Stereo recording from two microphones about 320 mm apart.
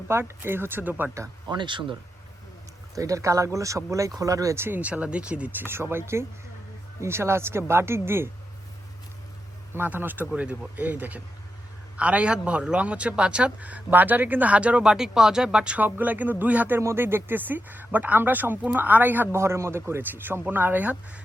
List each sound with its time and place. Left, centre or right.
0.1 s speech: centre
9.7 s a man's voice: centre